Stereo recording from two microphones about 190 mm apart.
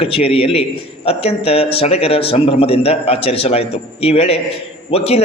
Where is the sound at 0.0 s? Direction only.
30° left (ahead or behind).